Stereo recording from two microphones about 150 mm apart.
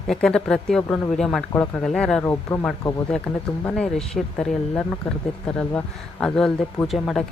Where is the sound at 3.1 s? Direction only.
5° left (ahead or behind).